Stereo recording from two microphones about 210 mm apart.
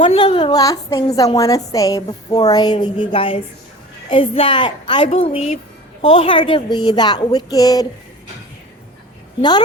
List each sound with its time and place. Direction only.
0.0 s a woman's voice: 25° left (ahead or behind)